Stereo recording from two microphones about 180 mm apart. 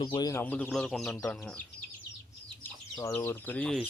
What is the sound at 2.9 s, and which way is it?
Speech, 15° left (ahead or behind).